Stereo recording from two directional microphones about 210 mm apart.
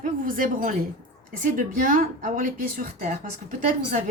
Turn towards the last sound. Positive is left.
turn(degrees=-35)  # may be behind; listen again after turning